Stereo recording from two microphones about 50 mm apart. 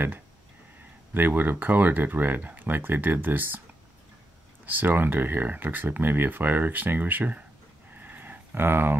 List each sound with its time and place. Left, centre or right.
1.1 s speech: right
4.6 s speech: right
7.9 s a sound: right